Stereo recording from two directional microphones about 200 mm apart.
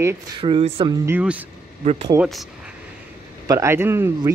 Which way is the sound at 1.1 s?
5° right (ahead or behind).